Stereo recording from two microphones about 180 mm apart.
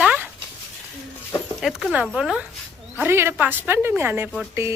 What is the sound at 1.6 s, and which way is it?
A woman's voice, centre (ahead or behind).